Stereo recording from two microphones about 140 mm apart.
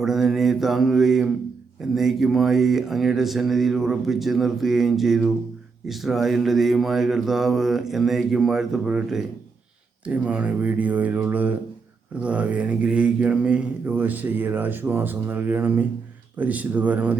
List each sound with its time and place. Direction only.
0.0 s speech: centre (ahead or behind)
10.1 s mantra: 10° right (ahead or behind)